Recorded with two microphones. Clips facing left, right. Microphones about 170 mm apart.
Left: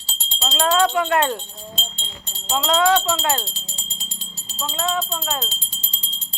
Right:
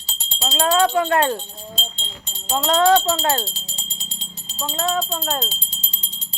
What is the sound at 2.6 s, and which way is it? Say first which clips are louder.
Speech: right 2 dB; 40° right (ahead or behind).